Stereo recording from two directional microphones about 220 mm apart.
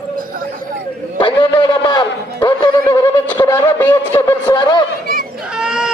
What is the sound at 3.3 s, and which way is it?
A man's voice, 10° left (ahead or behind).